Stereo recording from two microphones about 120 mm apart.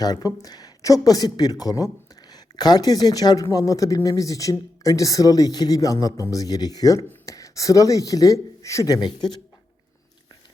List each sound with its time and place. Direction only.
0.0 s a man's voice: 30° left (ahead or behind)